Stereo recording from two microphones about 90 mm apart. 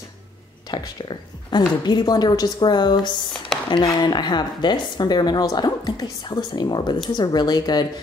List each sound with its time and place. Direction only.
0.7 s speech: 55° left (ahead or behind)
3.5 s a sound: 5° left (ahead or behind)
3.8 s speech: 55° left (ahead or behind)